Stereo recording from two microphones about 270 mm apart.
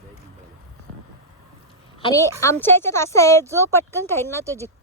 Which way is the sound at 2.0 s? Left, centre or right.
Centre.